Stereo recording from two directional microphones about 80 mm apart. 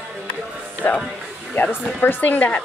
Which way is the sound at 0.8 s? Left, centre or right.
Left.